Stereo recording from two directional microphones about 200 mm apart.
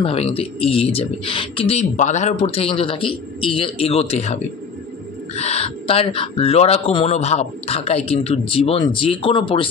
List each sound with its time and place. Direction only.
0.0 s speech: 30° left (ahead or behind)